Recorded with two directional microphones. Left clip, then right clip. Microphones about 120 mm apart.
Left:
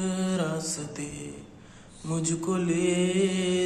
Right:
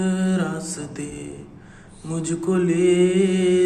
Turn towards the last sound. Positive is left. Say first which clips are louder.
# right 7 dB
turn(degrees=30)  # may be behind; listen again after turning